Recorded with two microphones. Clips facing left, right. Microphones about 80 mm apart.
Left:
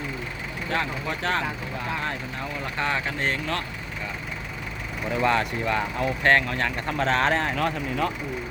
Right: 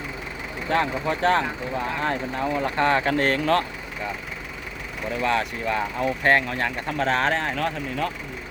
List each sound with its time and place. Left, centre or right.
0.7 s speech: right
5.2 s speech: centre